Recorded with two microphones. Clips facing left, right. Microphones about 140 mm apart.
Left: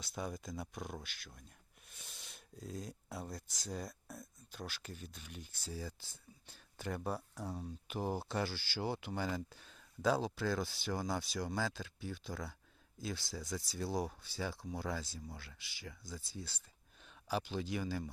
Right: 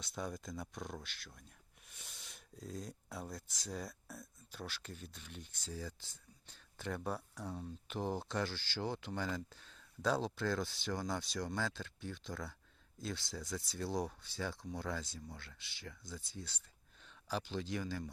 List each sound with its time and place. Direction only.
0.0 s speech: 5° left (ahead or behind)
2.6 s speech: centre (ahead or behind)